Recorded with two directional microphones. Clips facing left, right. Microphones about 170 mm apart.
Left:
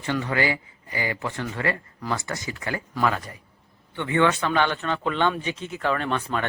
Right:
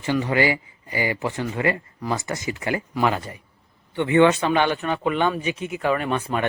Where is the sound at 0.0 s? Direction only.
20° right (ahead or behind).